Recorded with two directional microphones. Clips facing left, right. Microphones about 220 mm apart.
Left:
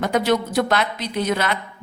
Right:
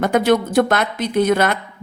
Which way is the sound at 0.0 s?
50° right (ahead or behind).